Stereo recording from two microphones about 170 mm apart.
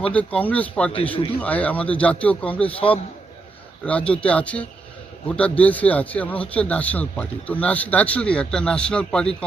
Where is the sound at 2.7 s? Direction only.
30° left (ahead or behind).